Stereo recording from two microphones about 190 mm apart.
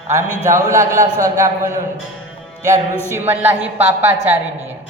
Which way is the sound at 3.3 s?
10° right (ahead or behind).